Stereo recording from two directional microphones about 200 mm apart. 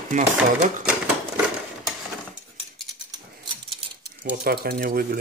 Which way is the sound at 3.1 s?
25° right (ahead or behind).